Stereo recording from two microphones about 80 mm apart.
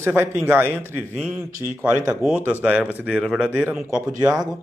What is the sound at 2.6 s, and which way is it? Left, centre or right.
Speech, centre.